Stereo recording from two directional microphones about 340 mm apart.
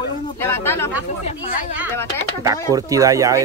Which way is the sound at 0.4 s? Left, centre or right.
Centre.